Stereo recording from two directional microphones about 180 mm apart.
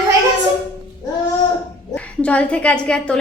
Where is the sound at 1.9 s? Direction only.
5° left (ahead or behind).